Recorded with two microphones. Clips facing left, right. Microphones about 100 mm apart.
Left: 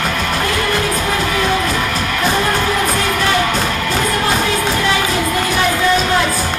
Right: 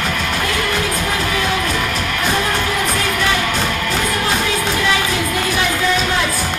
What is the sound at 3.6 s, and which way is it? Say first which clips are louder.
Music: left 1 dB; 10° left (ahead or behind).